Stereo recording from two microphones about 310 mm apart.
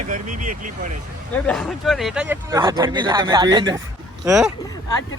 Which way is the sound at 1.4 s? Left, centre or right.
Centre.